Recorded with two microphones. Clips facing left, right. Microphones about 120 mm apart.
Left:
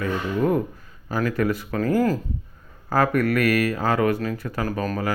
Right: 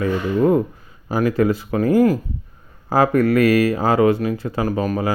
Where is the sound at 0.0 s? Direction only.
25° right (ahead or behind).